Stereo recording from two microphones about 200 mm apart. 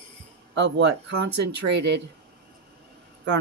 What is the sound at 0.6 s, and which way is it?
Speech, 60° right (ahead or behind).